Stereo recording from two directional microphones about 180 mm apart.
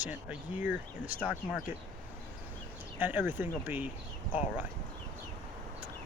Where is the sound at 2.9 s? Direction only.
10° right (ahead or behind).